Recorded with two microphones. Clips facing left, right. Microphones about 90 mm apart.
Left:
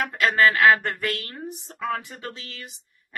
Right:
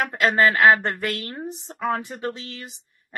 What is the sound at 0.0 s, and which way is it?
A woman's voice, 25° right (ahead or behind).